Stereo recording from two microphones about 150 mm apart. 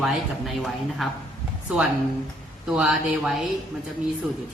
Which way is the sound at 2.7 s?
Centre (ahead or behind).